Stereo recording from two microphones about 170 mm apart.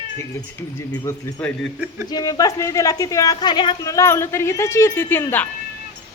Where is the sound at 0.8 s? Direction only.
15° left (ahead or behind).